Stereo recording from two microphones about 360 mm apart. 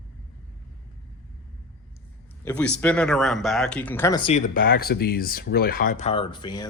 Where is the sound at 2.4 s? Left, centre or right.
Centre.